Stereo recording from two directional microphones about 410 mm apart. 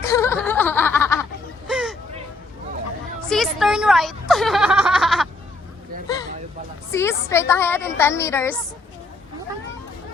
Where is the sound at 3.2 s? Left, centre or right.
Centre.